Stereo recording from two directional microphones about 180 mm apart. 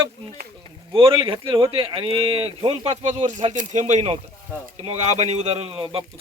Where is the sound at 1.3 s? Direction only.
25° right (ahead or behind).